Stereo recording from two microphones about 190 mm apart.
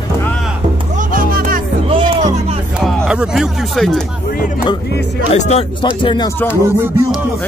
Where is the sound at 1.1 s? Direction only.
45° right (ahead or behind).